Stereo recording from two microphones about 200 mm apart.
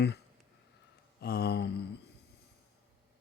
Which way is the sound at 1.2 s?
50° left (ahead or behind).